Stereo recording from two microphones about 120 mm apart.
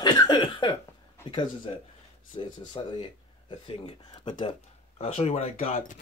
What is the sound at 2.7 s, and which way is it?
Speech, 40° left (ahead or behind).